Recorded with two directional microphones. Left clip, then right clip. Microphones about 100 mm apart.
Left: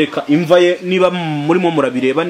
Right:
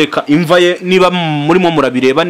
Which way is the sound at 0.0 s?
60° right (ahead or behind).